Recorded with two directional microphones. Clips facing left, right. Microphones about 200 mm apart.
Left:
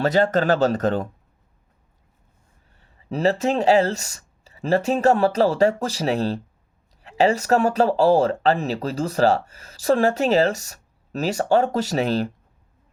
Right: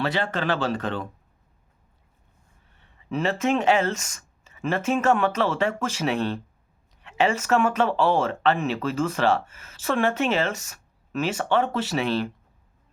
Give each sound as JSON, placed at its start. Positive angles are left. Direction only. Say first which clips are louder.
{"t": 0.0, "sound": "speech", "louder": "left 7 dB", "side_deg": 40}
{"t": 2.6, "sound": "speech", "louder": "left 2 dB", "side_deg": 40}